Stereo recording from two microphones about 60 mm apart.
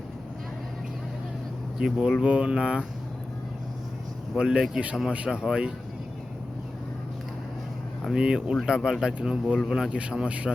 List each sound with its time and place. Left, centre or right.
1.8 s speech: centre
4.4 s speech: centre
8.1 s speech: centre